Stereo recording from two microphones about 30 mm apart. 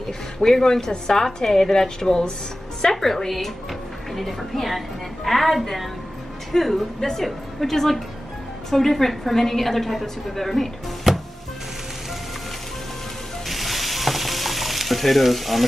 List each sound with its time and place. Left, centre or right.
0.4 s a woman's voice: centre
2.8 s a woman's voice: centre
13.5 s stir: centre